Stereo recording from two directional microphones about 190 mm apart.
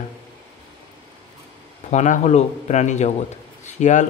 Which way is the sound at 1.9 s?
40° left (ahead or behind).